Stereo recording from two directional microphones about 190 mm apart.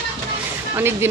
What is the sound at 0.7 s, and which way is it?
Speech, 10° right (ahead or behind).